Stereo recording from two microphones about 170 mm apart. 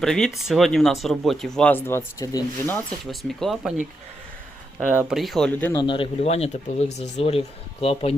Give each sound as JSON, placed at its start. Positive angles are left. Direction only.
{"t": 0.0, "sound": "speech", "side_deg": 0}
{"t": 3.1, "sound": "speech", "side_deg": 0}
{"t": 4.9, "sound": "speech", "side_deg": -5}
{"t": 5.7, "sound": "speech", "side_deg": 30}